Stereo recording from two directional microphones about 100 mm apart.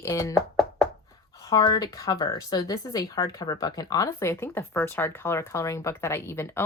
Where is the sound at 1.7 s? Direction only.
40° left (ahead or behind).